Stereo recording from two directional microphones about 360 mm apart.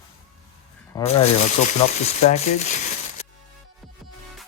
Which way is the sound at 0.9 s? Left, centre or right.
Centre.